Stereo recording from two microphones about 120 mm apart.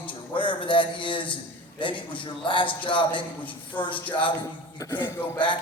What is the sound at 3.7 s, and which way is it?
Speech, 15° left (ahead or behind).